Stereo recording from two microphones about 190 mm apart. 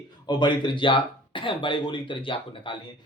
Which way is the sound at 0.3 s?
25° left (ahead or behind).